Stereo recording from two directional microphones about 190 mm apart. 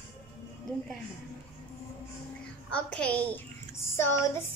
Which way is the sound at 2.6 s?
5° left (ahead or behind).